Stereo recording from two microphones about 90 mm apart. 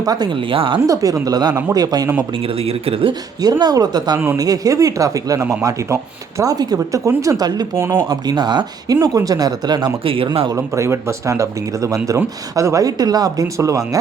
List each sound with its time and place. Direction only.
0.0 s speech: 45° right (ahead or behind)
0.5 s speech: 80° right
0.9 s speech: 40° right (ahead or behind)
2.6 s speech: 90° right
3.6 s speech: 50° right (ahead or behind)
7.8 s speech: 30° right (ahead or behind)
8.3 s speech: 55° right (ahead or behind)
9.0 s speech: 40° right (ahead or behind)
10.0 s speech: 90° right
10.5 s speech: 30° right (ahead or behind)